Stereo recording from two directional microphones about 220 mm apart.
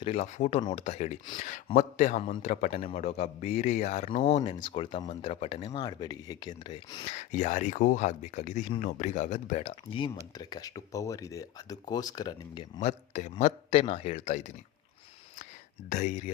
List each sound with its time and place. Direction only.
0.0 s a man's voice: 30° left (ahead or behind)
12.8 s speech: 30° left (ahead or behind)
15.9 s speech: 35° left (ahead or behind)